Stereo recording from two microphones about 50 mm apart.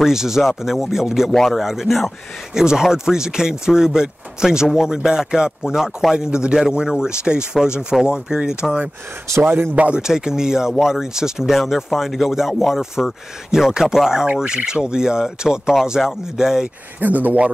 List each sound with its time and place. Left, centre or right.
0.0 s a man's voice: centre
1.3 s speech: centre
1.6 s speech: centre
2.5 s a man's voice: centre
9.8 s a man's voice: right
10.0 s a man's voice: centre
17.0 s speech: right